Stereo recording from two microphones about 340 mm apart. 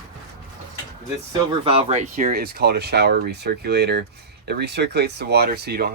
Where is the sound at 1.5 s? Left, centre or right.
Centre.